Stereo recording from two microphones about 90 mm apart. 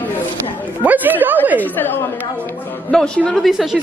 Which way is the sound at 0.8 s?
20° right (ahead or behind).